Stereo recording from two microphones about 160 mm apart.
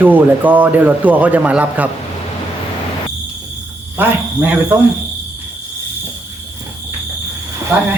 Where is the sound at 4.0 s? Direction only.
10° right (ahead or behind).